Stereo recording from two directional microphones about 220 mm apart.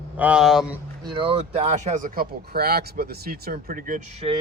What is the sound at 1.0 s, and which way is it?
Speech, 20° right (ahead or behind).